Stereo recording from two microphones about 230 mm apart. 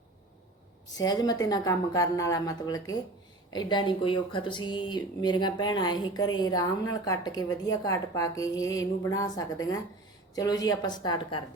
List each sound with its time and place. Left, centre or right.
0.9 s speech: centre